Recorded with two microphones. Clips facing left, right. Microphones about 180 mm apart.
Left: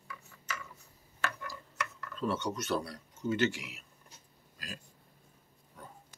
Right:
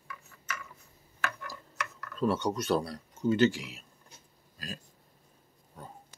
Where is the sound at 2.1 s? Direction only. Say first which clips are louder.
Right 5 dB; 35° right (ahead or behind).